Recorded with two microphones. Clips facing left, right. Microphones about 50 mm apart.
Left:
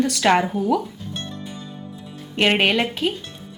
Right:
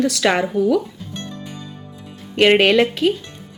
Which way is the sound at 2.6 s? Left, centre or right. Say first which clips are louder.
Right 5 dB; centre.